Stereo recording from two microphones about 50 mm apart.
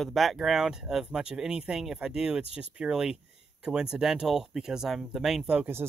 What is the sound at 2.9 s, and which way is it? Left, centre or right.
Speech, centre.